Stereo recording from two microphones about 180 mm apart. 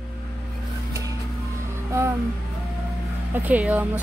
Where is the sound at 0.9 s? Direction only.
20° right (ahead or behind).